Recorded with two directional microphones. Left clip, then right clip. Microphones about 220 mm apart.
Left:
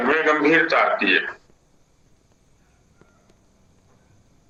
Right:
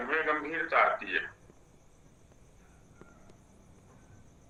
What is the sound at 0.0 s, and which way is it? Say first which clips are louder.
A man's voice: left 12 dB; 50° left (ahead or behind).